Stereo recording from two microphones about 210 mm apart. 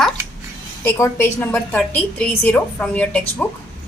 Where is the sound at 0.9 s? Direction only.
10° left (ahead or behind).